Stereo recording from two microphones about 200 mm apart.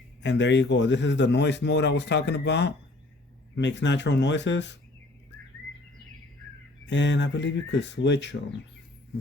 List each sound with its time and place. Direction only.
0.2 s a man's voice: 60° left (ahead or behind)
6.8 s a man's voice: 65° left (ahead or behind)